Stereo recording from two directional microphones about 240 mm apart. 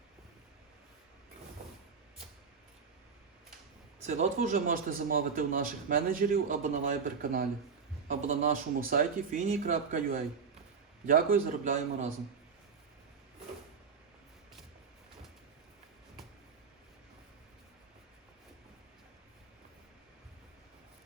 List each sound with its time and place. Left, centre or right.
4.0 s a man's voice: right